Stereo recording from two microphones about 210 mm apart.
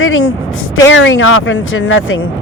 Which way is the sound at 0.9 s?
65° left (ahead or behind).